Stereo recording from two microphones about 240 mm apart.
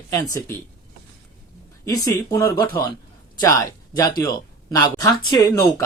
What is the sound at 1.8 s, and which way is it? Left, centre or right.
Speech, centre.